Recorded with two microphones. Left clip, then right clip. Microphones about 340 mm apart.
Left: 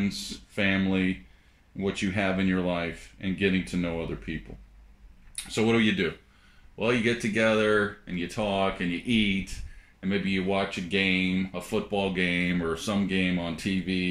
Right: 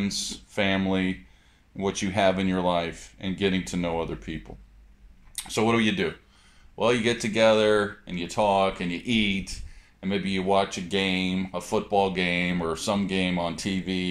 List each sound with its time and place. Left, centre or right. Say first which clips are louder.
0.1 s speech: right 5 dB; centre
1.8 s speech: right 4 dB; centre